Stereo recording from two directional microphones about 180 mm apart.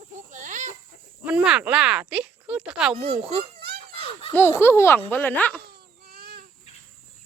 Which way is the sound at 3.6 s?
60° right (ahead or behind).